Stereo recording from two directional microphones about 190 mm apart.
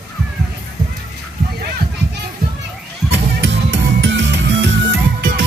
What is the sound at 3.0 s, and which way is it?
Music, 65° right (ahead or behind).